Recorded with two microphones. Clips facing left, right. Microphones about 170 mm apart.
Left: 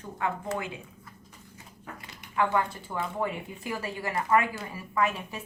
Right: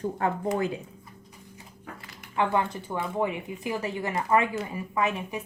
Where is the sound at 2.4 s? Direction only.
20° right (ahead or behind).